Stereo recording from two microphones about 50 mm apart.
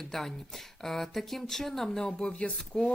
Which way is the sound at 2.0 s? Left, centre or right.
Centre.